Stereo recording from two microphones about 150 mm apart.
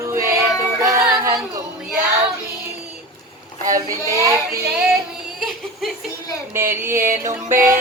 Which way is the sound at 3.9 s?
20° left (ahead or behind).